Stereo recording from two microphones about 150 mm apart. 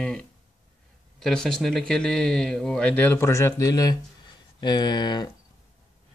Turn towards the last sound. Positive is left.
turn(degrees=30)  # may be behind; listen again after turning